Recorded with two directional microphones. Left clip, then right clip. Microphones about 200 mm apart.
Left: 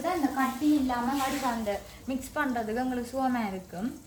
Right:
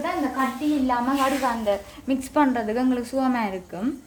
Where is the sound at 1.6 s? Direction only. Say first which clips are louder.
Right 8 dB; 45° right (ahead or behind).